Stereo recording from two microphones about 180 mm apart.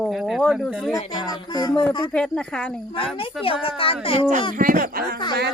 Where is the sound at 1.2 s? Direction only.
20° left (ahead or behind).